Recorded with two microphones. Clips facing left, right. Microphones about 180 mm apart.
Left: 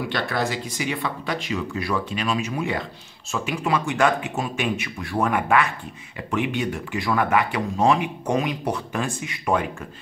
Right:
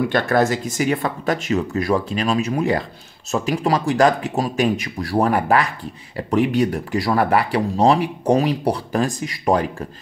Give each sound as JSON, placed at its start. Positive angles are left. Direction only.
{"t": 0.1, "sound": "speech", "side_deg": -45}